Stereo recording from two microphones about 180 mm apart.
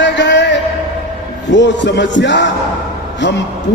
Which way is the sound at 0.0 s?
75° left (ahead or behind).